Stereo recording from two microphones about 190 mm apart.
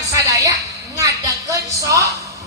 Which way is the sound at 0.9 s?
15° right (ahead or behind).